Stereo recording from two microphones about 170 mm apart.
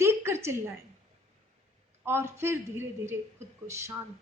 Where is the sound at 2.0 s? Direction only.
15° right (ahead or behind).